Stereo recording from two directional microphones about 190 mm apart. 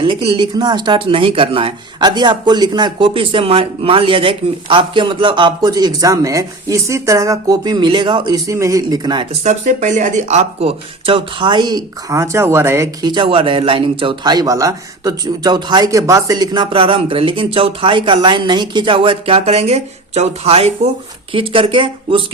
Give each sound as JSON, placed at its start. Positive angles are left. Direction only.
{"t": 0.0, "sound": "speech", "side_deg": -30}
{"t": 9.4, "sound": "speech", "side_deg": -40}